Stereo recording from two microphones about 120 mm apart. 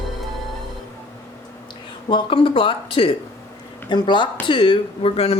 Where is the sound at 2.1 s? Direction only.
45° left (ahead or behind).